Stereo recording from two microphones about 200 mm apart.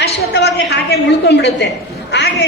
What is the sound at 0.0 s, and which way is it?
A man's voice, 55° left (ahead or behind).